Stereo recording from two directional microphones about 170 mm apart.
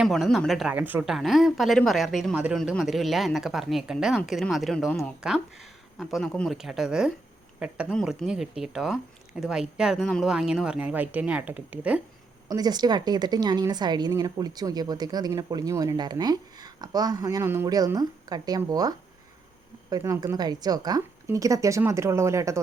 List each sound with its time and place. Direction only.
0.0 s speech: centre (ahead or behind)
0.7 s speech: 10° right (ahead or behind)
12.5 s a woman's voice: 25° right (ahead or behind)